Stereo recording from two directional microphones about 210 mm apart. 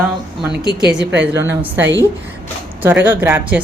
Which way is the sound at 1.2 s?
10° right (ahead or behind).